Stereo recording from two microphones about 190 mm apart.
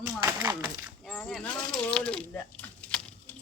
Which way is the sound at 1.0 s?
5° left (ahead or behind).